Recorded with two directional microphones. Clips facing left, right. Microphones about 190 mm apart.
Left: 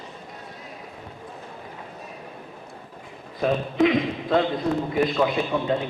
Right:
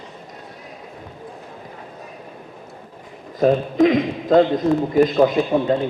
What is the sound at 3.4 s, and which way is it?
A man's voice, 40° right (ahead or behind).